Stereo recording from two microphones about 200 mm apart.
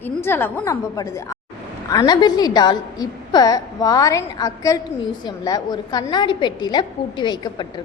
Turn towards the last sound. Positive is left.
turn(degrees=20)  # may be behind; listen again after turning